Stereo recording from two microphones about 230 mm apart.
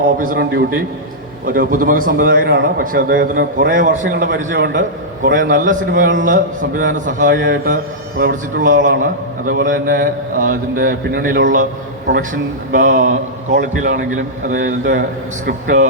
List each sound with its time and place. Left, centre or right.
0.2 s a man's voice: right
4.5 s a man's voice: right